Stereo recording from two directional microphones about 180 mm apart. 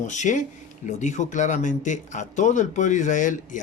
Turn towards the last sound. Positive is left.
turn(degrees=45)  # may be behind; listen again after turning